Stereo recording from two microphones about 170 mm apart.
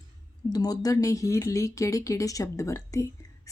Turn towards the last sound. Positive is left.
turn(degrees=20)  # may be behind; listen again after turning